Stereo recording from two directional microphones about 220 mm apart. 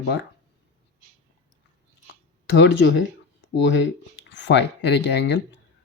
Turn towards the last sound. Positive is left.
turn(degrees=50)  # may be behind; listen again after turning